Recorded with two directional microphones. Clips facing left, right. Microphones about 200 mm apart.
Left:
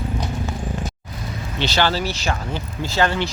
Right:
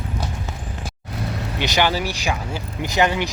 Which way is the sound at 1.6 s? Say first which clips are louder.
Even; 15° right (ahead or behind).